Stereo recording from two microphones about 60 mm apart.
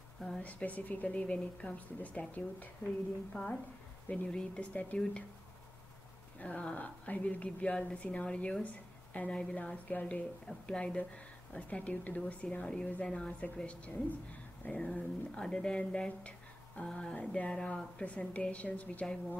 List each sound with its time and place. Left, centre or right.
0.4 s speech: left
6.4 s speech: left
10.4 s speech: centre
12.6 s speech: centre
14.6 s dog: left
15.0 s speech: centre